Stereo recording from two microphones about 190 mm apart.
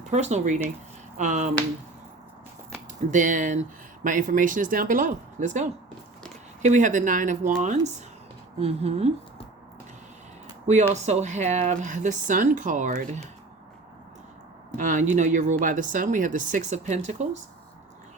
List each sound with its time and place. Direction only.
0.0 s speech: 35° right (ahead or behind)
3.1 s speech: 40° right (ahead or behind)
10.9 s speech: 35° right (ahead or behind)
14.8 s speech: 40° right (ahead or behind)